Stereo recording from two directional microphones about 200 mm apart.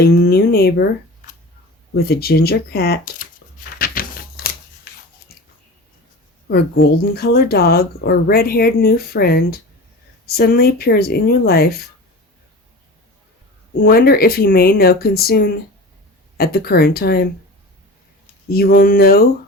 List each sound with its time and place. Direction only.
0.0 s speech: 50° left (ahead or behind)
2.0 s a sound: 50° left (ahead or behind)
6.5 s speech: 50° left (ahead or behind)
13.8 s speech: 50° left (ahead or behind)
18.4 s speech: 50° left (ahead or behind)